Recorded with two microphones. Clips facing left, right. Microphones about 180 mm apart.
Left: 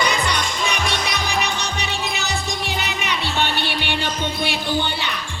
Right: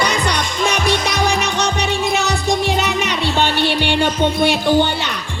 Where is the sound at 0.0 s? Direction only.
70° right (ahead or behind).